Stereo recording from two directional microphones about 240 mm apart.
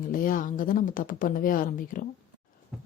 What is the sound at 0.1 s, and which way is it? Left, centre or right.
Speech, left.